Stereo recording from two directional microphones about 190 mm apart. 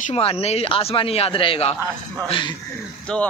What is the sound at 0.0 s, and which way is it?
Speech, 30° left (ahead or behind).